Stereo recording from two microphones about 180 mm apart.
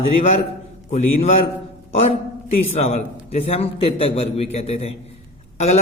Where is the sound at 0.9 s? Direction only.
40° left (ahead or behind).